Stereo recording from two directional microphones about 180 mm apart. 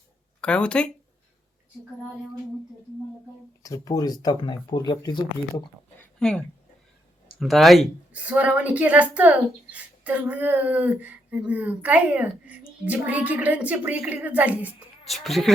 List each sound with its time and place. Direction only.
0.4 s speech: 5° left (ahead or behind)
3.6 s speech: 20° left (ahead or behind)
6.1 s speech: 5° left (ahead or behind)